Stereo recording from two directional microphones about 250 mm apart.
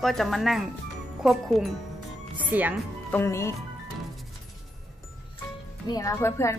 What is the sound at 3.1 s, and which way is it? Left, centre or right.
Speech, centre.